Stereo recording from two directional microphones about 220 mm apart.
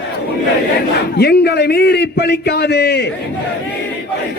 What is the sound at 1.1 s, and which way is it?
A man's voice, 45° left (ahead or behind).